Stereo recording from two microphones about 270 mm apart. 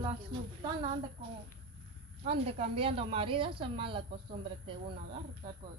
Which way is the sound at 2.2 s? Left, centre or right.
Right.